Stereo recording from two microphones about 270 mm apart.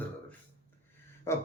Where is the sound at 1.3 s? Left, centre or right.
Centre.